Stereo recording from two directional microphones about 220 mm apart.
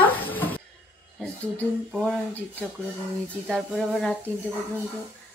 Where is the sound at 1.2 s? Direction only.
5° left (ahead or behind).